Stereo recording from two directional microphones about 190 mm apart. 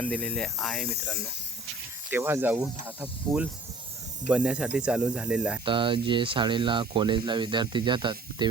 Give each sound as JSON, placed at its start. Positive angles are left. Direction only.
{"t": 0.0, "sound": "speech", "side_deg": 5}
{"t": 2.0, "sound": "speech", "side_deg": -10}
{"t": 5.6, "sound": "speech", "side_deg": -25}